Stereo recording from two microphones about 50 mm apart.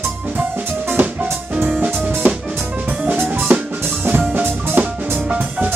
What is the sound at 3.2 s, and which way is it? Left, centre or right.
Drum kit, right.